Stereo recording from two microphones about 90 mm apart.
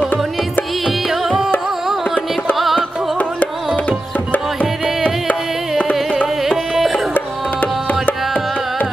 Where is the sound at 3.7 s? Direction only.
15° left (ahead or behind).